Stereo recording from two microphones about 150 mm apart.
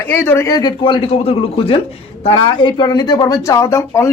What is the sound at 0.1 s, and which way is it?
A man's voice, 15° left (ahead or behind).